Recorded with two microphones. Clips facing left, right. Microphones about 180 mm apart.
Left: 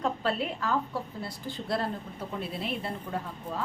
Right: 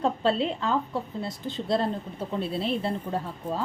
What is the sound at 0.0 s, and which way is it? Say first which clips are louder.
A woman's voice: right 5 dB; 25° right (ahead or behind).